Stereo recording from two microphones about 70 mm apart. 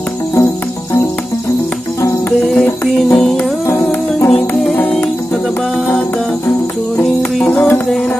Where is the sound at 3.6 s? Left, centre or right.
Left.